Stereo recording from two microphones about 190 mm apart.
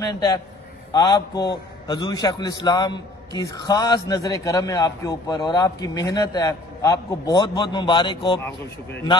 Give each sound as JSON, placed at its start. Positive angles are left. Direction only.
{"t": 0.1, "sound": "a man's voice", "side_deg": 20}